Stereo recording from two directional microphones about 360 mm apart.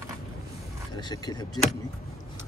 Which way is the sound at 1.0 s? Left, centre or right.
Centre.